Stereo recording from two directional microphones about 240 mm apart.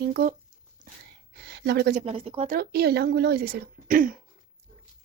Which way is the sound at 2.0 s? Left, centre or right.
Right.